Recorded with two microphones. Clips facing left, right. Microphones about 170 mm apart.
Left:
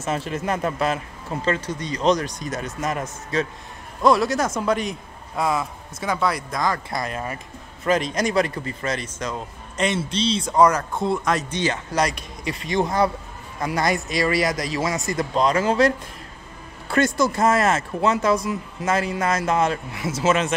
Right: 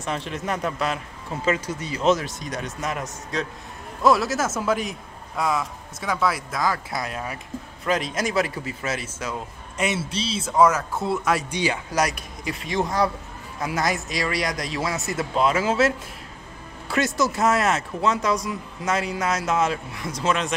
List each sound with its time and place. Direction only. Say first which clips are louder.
0.0 s a man's voice: left 3 dB; 5° left (ahead or behind)
16.9 s a man's voice: left 3 dB; centre (ahead or behind)